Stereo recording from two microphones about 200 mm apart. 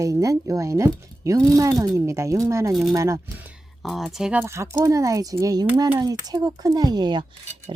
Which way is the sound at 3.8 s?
Centre (ahead or behind).